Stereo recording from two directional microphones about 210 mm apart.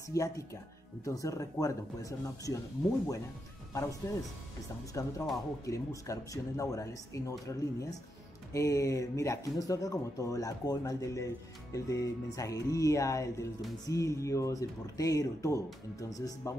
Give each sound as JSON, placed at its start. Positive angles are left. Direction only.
{"t": 0.1, "sound": "speech", "side_deg": 15}
{"t": 3.7, "sound": "speech", "side_deg": 15}